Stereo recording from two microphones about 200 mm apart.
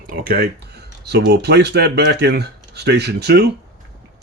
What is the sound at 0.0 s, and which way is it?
Speech, 45° right (ahead or behind).